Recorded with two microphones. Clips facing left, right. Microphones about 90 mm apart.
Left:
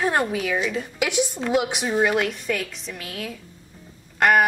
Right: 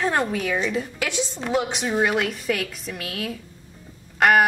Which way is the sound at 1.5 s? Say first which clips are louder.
Right 1 dB; 5° left (ahead or behind).